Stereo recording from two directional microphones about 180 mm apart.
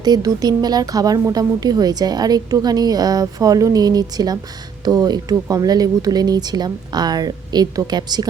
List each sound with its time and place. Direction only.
0.0 s a woman's voice: 20° right (ahead or behind)